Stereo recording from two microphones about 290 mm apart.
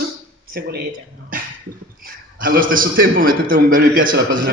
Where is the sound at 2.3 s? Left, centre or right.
Right.